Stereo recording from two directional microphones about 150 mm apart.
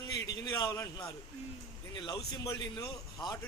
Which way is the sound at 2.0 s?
30° left (ahead or behind).